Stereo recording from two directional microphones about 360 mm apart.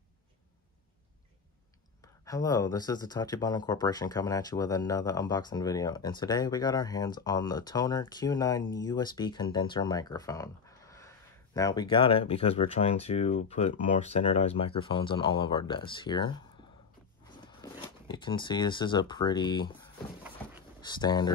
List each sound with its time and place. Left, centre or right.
2.2 s speech: centre
20.8 s speech: centre